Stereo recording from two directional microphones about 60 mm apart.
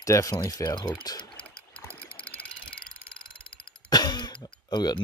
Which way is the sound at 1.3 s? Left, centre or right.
Left.